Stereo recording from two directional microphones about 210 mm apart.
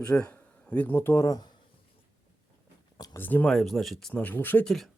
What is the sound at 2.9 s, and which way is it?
Speech, 15° left (ahead or behind).